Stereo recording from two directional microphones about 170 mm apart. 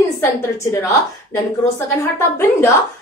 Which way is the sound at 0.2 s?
15° left (ahead or behind).